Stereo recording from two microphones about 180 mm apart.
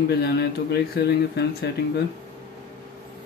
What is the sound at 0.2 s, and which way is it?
Speech, 60° left (ahead or behind).